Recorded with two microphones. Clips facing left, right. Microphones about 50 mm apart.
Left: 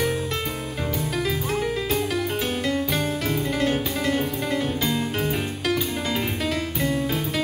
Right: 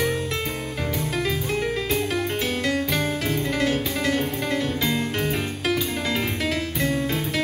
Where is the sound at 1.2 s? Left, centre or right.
Centre.